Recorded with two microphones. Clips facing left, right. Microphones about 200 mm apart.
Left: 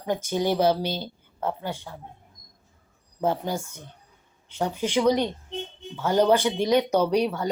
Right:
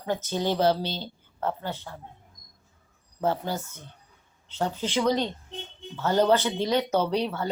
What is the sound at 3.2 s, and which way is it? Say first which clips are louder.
Speech: left 2 dB; 15° left (ahead or behind).